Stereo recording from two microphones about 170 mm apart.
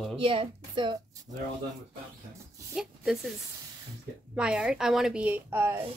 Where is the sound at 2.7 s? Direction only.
5° right (ahead or behind).